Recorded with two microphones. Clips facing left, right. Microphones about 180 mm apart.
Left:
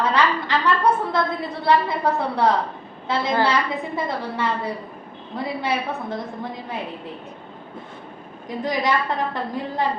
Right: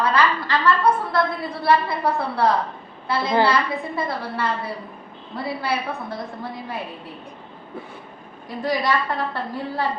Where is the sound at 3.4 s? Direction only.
20° left (ahead or behind).